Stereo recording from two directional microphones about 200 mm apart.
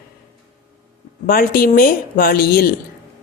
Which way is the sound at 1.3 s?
45° left (ahead or behind).